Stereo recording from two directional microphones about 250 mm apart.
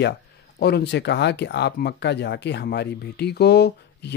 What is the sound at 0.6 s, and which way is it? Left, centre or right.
Speech, left.